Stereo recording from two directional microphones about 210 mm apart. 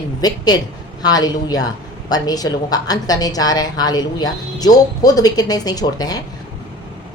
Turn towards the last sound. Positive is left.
turn(degrees=20)  # may be behind; listen again after turning